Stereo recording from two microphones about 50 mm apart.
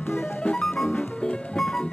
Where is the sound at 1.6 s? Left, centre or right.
Centre.